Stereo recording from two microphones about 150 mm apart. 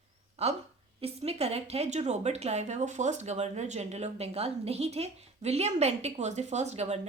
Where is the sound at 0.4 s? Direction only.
45° right (ahead or behind).